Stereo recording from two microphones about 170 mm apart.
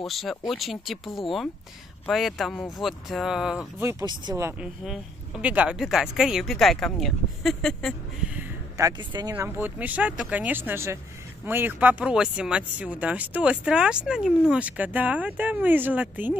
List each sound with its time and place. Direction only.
0.0 s speech: centre (ahead or behind)
4.0 s speech: 25° right (ahead or behind)
4.8 s speech: 5° right (ahead or behind)
8.3 s a sound: 10° right (ahead or behind)
9.3 s speech: 10° right (ahead or behind)